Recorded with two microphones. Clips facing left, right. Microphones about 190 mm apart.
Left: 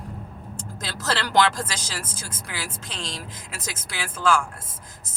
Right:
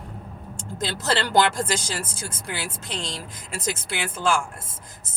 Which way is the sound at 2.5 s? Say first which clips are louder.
Right 4 dB; 30° right (ahead or behind).